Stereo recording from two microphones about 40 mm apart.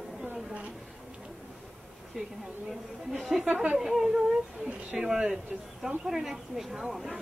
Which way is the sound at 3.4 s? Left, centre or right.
Right.